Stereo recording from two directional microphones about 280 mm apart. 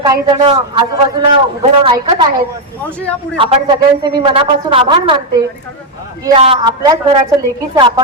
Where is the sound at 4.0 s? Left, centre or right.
Centre.